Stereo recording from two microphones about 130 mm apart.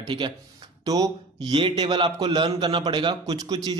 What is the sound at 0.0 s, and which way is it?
A man's voice, 40° right (ahead or behind).